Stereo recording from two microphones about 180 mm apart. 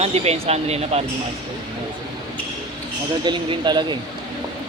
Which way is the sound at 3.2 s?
25° right (ahead or behind).